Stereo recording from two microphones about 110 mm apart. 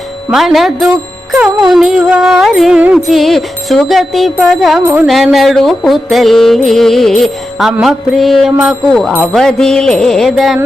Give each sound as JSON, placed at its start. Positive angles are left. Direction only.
{"t": 0.3, "sound": "music", "side_deg": 0}
{"t": 4.8, "sound": "music", "side_deg": -20}
{"t": 5.0, "sound": "music", "side_deg": 0}